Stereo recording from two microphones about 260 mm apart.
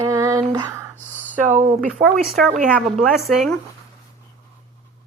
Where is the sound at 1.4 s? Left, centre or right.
Right.